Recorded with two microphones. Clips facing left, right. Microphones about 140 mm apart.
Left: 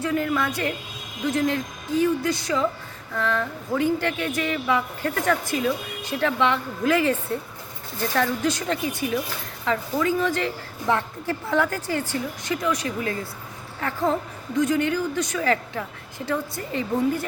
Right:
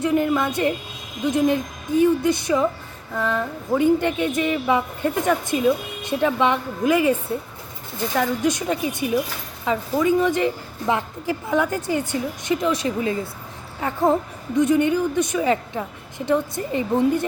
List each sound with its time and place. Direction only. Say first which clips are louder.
0.0 s speech: right 4 dB; 20° right (ahead or behind)